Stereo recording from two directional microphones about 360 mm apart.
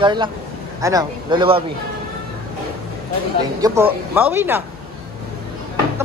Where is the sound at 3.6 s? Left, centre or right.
Centre.